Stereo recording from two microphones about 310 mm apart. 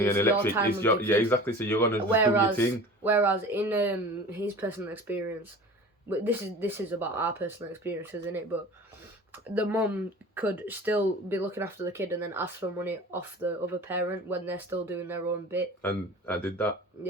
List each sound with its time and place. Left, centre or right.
0.0 s speech: centre
2.0 s speech: centre
15.8 s speech: centre